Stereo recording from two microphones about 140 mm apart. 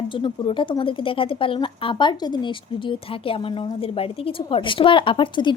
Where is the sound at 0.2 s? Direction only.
35° left (ahead or behind).